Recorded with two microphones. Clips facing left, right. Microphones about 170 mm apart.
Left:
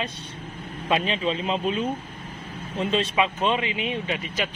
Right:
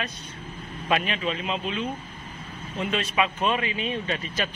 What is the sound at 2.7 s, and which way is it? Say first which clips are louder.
Speech: left 2 dB; 25° left (ahead or behind).